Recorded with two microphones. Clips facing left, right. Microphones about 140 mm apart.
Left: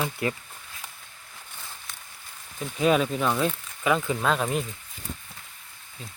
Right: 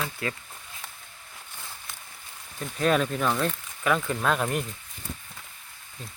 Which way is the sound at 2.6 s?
5° left (ahead or behind).